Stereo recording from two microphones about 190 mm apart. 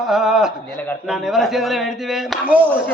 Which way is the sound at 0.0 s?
Centre (ahead or behind).